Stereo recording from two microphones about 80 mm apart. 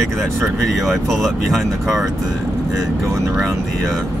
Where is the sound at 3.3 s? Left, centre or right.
Centre.